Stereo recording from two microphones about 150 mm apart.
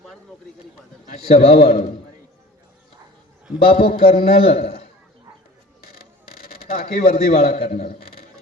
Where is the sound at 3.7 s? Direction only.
85° left.